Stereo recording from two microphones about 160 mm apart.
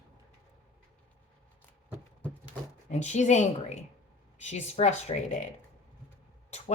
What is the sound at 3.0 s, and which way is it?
Speech, 45° left (ahead or behind).